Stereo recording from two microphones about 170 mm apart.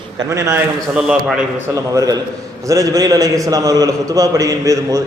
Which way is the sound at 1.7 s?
20° right (ahead or behind).